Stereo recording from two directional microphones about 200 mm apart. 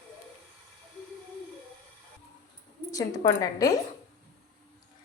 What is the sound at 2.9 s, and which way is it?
Speech, 20° left (ahead or behind).